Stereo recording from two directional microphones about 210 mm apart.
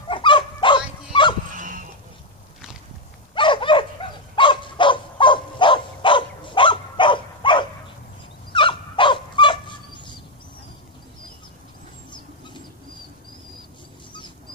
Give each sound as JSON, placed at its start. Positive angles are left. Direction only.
{"t": 0.1, "sound": "dog", "side_deg": 20}
{"t": 1.5, "sound": "a sound", "side_deg": -40}
{"t": 3.3, "sound": "dog", "side_deg": 25}